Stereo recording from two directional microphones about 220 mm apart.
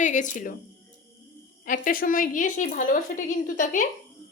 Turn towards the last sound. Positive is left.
turn(degrees=35)  # may be behind; listen again after turning